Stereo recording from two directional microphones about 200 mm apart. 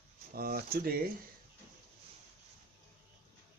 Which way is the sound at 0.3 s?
50° right (ahead or behind).